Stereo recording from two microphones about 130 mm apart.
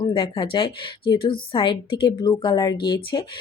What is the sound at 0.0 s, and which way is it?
A woman's voice, 40° left (ahead or behind).